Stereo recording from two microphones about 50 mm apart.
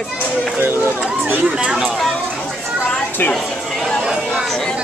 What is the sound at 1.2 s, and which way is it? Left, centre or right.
Speech, right.